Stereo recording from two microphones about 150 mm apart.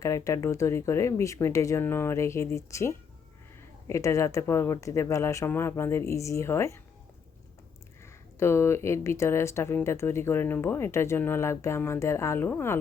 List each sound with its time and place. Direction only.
0.0 s speech: 20° left (ahead or behind)
8.0 s speech: 15° left (ahead or behind)